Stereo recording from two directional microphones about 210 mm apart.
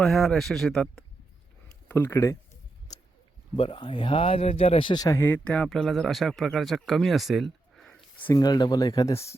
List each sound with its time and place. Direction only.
0.0 s speech: centre (ahead or behind)
1.9 s a sound: 10° left (ahead or behind)
3.5 s speech: 25° left (ahead or behind); by 7.9 s centre (ahead or behind)
8.3 s speech: 20° left (ahead or behind)